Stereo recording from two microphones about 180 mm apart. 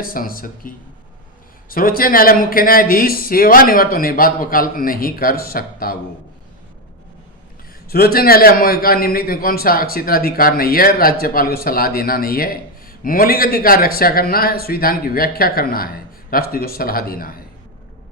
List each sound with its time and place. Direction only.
0.0 s speech: 55° left (ahead or behind)
1.7 s speech: 55° left (ahead or behind)
7.9 s a man's voice: 55° left (ahead or behind)